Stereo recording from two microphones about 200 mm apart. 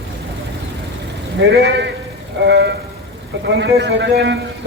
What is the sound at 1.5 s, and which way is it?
A man's voice, 60° right (ahead or behind).